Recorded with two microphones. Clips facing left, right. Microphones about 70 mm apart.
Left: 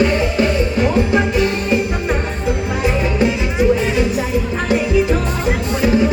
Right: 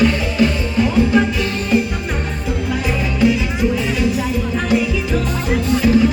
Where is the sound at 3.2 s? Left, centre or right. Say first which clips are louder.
Right 1 dB; left.